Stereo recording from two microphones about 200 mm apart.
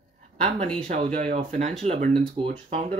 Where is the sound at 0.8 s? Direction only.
35° right (ahead or behind).